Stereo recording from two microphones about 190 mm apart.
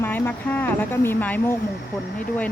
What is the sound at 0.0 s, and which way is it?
Speech, 10° left (ahead or behind).